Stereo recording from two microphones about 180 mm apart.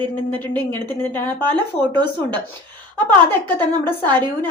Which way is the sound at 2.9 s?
10° left (ahead or behind).